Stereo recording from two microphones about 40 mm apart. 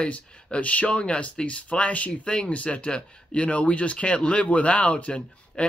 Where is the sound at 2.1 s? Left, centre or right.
Left.